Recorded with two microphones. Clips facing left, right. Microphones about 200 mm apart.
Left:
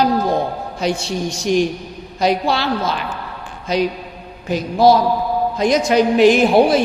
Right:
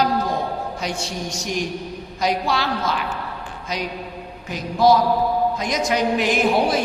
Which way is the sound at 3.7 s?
30° left (ahead or behind).